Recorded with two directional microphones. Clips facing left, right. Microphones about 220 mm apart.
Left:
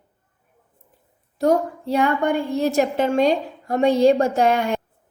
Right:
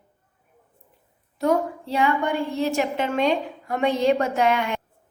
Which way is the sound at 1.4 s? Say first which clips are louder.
Left 3 dB; 35° left (ahead or behind).